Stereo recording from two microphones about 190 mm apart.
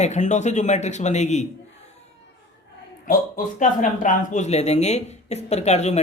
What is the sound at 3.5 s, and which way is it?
Speech, 40° left (ahead or behind).